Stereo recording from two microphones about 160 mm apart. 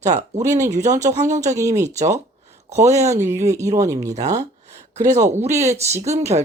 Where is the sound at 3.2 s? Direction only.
15° right (ahead or behind).